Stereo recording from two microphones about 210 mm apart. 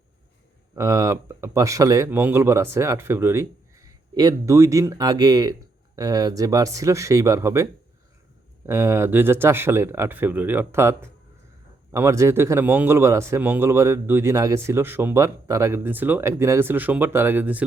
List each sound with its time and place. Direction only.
0.8 s speech: 15° right (ahead or behind)